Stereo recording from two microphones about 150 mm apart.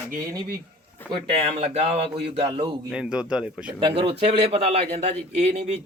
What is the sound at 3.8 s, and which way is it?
A man's voice, 35° right (ahead or behind).